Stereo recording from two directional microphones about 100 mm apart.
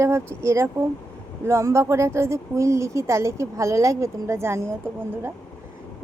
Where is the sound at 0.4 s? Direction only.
30° right (ahead or behind).